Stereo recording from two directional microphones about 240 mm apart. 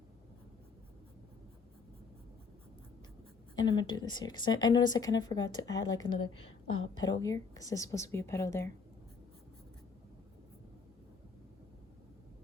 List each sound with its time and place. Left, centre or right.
3.5 s speech: centre